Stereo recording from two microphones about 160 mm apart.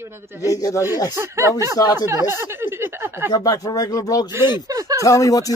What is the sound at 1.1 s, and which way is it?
Speech, 15° right (ahead or behind).